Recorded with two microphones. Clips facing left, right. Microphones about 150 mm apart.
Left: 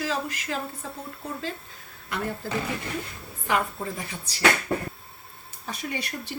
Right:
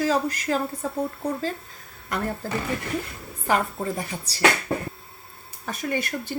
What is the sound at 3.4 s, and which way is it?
Speech, 40° right (ahead or behind).